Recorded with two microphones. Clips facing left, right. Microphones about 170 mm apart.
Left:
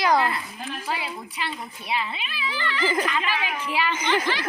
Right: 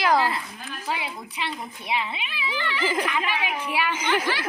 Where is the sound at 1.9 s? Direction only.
15° right (ahead or behind).